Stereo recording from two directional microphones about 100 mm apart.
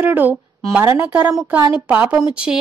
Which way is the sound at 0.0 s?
20° right (ahead or behind).